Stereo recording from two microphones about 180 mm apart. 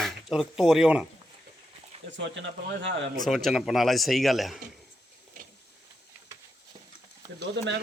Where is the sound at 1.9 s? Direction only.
35° right (ahead or behind).